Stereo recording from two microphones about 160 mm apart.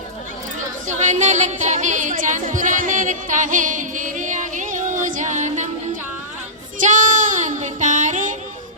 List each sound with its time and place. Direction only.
0.9 s speech: 50° right (ahead or behind)
6.7 s child singing: 50° right (ahead or behind)